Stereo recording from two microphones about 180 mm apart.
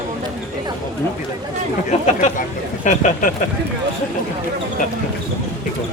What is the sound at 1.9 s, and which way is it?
Speech, 40° left (ahead or behind).